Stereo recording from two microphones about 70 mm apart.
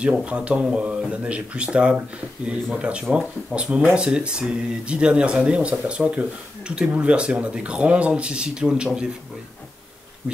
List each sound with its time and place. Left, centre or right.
0.2 s speech: centre